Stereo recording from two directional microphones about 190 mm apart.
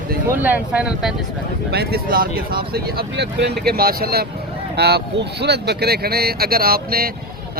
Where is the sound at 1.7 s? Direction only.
55° right (ahead or behind).